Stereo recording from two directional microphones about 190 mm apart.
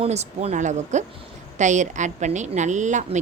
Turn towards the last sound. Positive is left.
turn(degrees=-40)  # may be behind; listen again after turning